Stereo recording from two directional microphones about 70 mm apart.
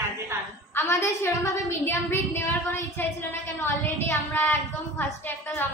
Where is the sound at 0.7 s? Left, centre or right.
Left.